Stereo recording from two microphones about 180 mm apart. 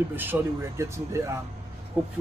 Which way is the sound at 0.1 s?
10° right (ahead or behind).